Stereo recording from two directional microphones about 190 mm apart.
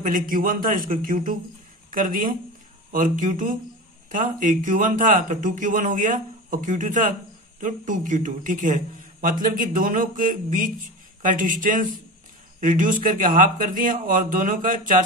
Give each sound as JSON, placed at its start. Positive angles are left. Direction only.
{"t": 0.0, "sound": "a man's voice", "side_deg": -45}